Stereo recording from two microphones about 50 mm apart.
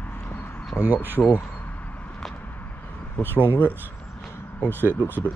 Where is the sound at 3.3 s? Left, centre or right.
Right.